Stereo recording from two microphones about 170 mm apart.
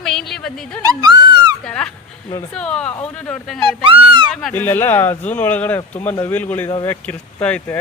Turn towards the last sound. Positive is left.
turn(degrees=5)  # may be behind; listen again after turning